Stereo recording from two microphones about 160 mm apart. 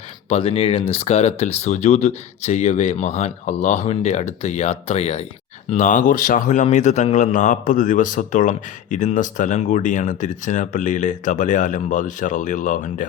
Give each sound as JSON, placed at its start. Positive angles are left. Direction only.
{"t": 0.3, "sound": "a man's voice", "side_deg": 35}
{"t": 5.7, "sound": "a man's voice", "side_deg": 50}